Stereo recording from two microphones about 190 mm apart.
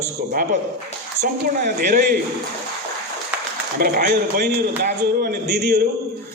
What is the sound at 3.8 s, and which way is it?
A man's voice, 55° right (ahead or behind).